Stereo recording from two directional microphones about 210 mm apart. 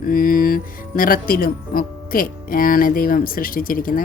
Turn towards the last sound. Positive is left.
turn(degrees=40)  # may be behind; listen again after turning